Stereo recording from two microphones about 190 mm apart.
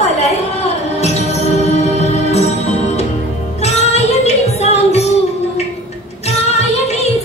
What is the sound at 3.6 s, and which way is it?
Music, 35° left (ahead or behind).